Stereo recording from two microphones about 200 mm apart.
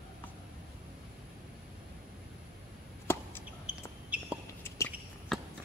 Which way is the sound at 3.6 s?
5° right (ahead or behind).